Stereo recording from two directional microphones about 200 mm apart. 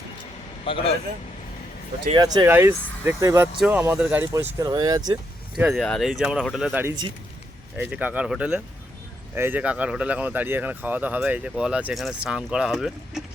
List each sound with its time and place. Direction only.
0.6 s speech: 25° left (ahead or behind)
2.1 s speech: 20° right (ahead or behind)
5.5 s speech: 5° right (ahead or behind)